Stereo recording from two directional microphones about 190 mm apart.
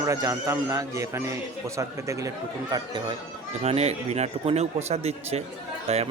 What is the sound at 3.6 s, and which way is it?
A man's voice, 35° right (ahead or behind).